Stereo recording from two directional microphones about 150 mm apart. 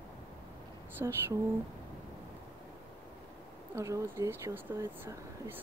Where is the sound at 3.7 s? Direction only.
20° right (ahead or behind).